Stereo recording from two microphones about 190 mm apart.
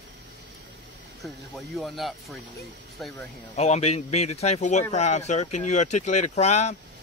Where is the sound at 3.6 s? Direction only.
35° left (ahead or behind).